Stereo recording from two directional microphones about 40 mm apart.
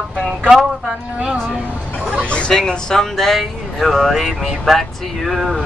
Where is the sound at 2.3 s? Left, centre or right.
Left.